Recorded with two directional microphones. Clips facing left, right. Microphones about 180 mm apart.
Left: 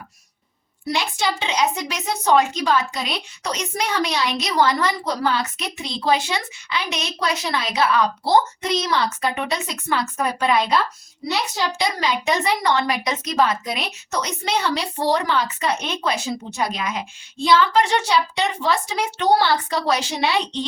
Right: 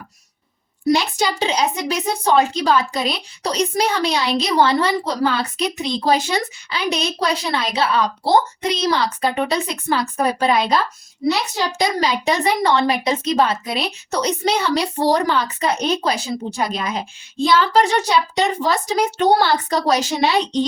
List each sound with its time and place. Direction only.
0.9 s a woman's voice: 40° right (ahead or behind)
11.8 s a woman's voice: 40° right (ahead or behind)